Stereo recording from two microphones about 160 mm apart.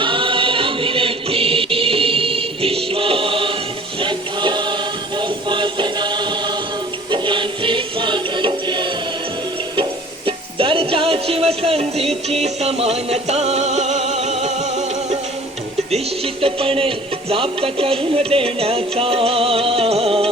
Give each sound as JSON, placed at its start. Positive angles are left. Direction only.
{"t": 0.0, "sound": "music", "side_deg": -30}
{"t": 10.2, "sound": "music", "side_deg": -35}